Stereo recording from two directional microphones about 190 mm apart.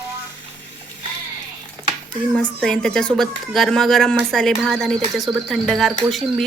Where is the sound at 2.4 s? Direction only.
5° left (ahead or behind).